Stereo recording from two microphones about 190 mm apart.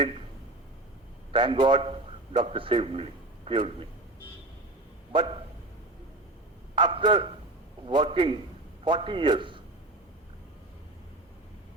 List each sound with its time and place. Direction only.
1.3 s a man's voice: 25° right (ahead or behind)
5.1 s a man's voice: 25° right (ahead or behind)
6.7 s a man's voice: 25° right (ahead or behind)